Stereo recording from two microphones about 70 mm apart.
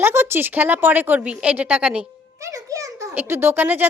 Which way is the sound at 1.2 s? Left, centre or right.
Centre.